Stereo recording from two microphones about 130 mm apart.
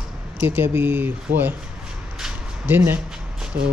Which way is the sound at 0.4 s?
15° right (ahead or behind).